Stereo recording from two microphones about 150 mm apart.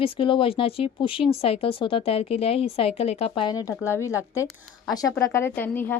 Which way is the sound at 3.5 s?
25° left (ahead or behind).